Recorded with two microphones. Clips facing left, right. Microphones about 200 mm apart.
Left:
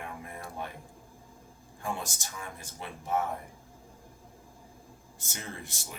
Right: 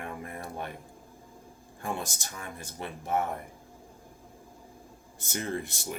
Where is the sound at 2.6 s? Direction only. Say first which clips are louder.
Right 4 dB; 60° right (ahead or behind).